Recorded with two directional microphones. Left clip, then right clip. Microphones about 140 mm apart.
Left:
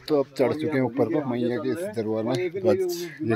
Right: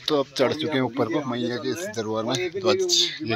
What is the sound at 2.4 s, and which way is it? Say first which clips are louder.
Speech: right 1 dB; 75° left (ahead or behind).